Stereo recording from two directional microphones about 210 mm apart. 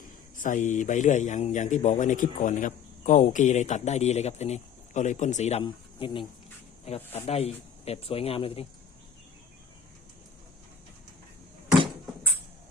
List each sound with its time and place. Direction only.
0.3 s a man's voice: 40° left (ahead or behind)